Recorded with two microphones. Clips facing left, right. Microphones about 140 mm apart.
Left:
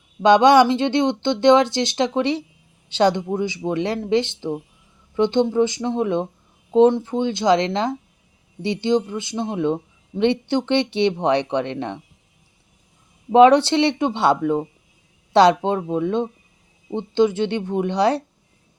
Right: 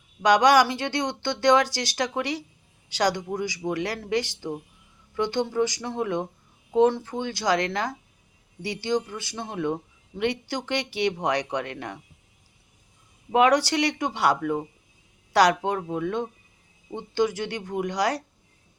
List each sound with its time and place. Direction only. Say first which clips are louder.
0.2 s speech: left 5 dB; 25° left (ahead or behind)
13.3 s speech: left 8 dB; 25° left (ahead or behind)